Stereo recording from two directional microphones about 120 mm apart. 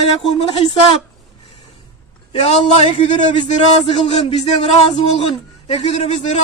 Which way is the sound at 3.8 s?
55° left (ahead or behind).